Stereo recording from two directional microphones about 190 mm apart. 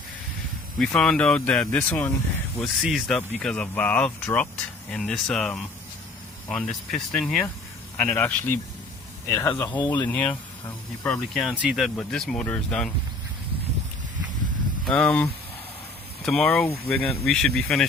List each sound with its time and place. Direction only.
0.8 s speech: 5° left (ahead or behind)
6.9 s speech: 5° left (ahead or behind)
9.7 s speech: 25° left (ahead or behind)
10.1 s speech: 10° left (ahead or behind)
14.8 s speech: 5° left (ahead or behind)